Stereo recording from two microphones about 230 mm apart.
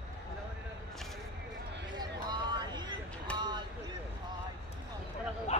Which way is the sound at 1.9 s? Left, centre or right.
Centre.